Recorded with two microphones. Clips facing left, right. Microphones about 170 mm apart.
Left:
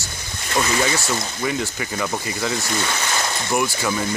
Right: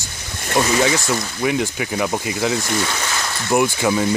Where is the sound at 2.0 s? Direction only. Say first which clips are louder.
Right 4 dB; 15° right (ahead or behind).